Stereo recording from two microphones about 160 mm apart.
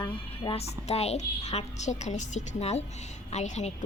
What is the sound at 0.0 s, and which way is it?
A woman's voice, 30° left (ahead or behind).